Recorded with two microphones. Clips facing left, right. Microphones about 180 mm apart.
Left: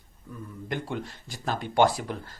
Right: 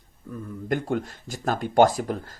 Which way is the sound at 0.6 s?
45° right (ahead or behind).